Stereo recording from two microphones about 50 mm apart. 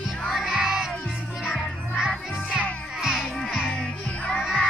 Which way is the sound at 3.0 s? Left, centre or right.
Centre.